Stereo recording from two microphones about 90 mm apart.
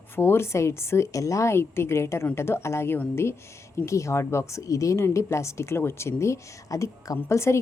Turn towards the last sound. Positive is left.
turn(degrees=30)  # may be behind; listen again after turning